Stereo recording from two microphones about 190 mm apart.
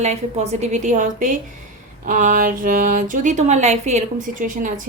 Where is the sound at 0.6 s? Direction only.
40° right (ahead or behind).